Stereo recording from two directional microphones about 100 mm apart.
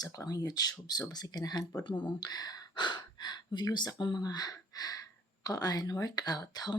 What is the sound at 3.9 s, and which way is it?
Speech, 45° left (ahead or behind).